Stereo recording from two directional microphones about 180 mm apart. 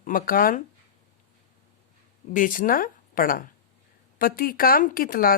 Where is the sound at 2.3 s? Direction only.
45° left (ahead or behind).